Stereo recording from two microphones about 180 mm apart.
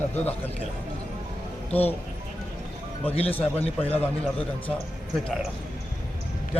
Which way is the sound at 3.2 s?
10° left (ahead or behind).